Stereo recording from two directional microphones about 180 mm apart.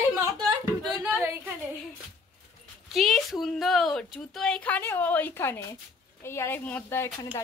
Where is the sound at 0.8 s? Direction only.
Centre (ahead or behind).